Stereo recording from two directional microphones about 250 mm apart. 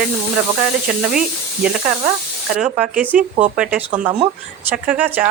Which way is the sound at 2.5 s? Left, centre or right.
Centre.